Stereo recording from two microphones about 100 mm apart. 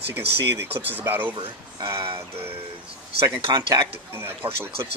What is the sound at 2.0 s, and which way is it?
Music, 65° right (ahead or behind).